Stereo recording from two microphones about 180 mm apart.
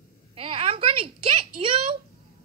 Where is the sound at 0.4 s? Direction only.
30° right (ahead or behind).